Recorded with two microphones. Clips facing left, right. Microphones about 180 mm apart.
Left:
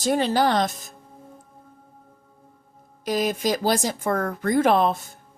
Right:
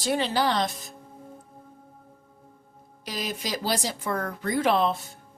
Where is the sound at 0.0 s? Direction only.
45° left (ahead or behind).